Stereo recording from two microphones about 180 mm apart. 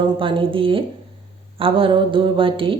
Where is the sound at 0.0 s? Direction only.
30° right (ahead or behind).